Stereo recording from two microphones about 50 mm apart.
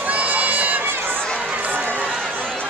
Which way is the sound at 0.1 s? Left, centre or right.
Right.